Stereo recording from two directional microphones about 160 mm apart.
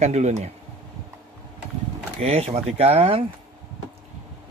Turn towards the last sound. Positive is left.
turn(degrees=-40)  # may be behind; listen again after turning